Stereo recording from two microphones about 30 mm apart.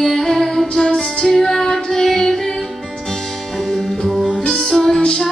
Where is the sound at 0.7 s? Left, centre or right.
Centre.